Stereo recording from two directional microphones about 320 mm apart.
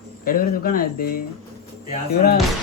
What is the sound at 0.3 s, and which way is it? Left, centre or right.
Speech, left.